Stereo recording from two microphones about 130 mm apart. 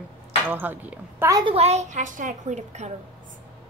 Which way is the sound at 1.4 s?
50° right (ahead or behind).